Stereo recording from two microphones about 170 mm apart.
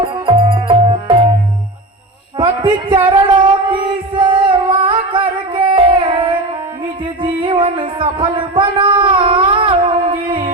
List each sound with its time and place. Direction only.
0.0 s music: 30° right (ahead or behind)
2.4 s a sound: 30° right (ahead or behind)
7.0 s music: 30° right (ahead or behind)